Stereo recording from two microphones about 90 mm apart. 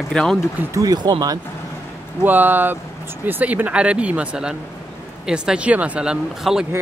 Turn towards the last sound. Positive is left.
turn(degrees=-5)  # may be behind; listen again after turning